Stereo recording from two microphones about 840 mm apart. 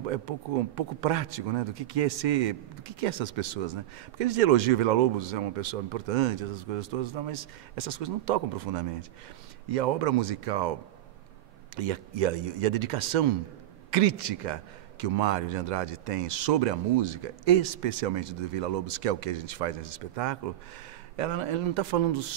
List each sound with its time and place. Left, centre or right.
0.3 s a man's voice: right